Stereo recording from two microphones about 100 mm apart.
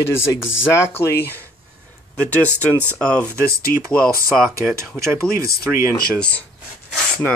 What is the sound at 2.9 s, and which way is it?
Speech, 10° left (ahead or behind).